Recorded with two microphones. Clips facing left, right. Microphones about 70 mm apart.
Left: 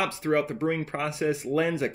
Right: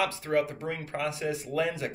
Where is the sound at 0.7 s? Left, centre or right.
Left.